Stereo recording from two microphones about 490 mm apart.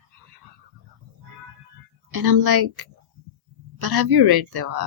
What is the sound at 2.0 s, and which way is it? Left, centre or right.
Speech, right.